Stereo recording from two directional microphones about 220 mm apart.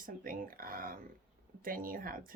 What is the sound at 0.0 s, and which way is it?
Speech, 40° right (ahead or behind).